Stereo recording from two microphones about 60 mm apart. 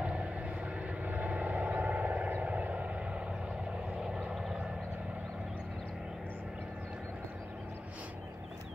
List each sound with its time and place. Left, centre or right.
0.0 s vehicle: centre